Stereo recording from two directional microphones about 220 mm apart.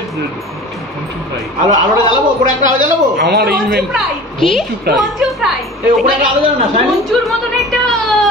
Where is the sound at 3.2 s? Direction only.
45° right (ahead or behind).